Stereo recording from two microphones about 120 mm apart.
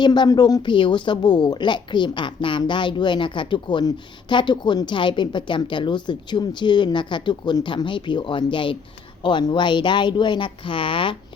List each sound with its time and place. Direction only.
0.0 s a woman's voice: 40° left (ahead or behind)